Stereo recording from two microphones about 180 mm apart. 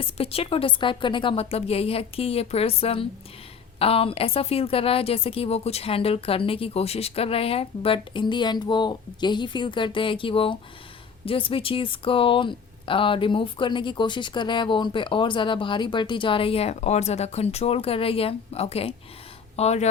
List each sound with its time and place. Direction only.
0.0 s a woman's voice: 35° left (ahead or behind)